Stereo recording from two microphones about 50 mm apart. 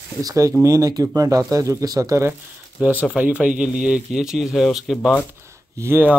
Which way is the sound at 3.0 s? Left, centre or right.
Right.